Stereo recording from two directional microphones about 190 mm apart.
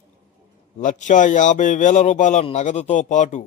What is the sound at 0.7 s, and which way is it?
A man's voice, 40° left (ahead or behind).